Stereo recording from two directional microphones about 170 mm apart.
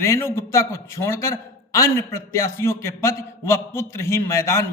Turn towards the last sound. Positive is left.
turn(degrees=15)  # may be behind; listen again after turning